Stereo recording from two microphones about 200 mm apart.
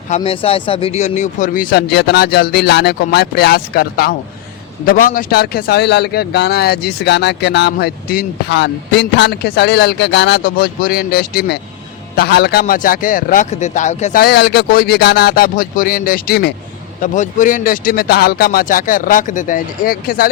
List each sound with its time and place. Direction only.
0.2 s a man's voice: 30° left (ahead or behind); by 20.3 s 45° left (ahead or behind)